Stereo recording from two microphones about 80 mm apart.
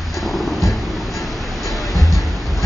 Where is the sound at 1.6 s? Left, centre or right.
Centre.